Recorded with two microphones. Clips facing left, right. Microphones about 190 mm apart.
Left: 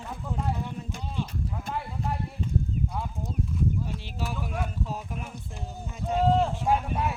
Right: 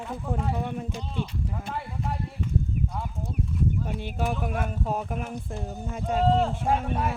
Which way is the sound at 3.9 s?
50° right (ahead or behind).